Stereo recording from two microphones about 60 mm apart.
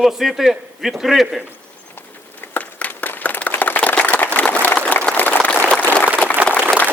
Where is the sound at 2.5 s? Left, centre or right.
Left.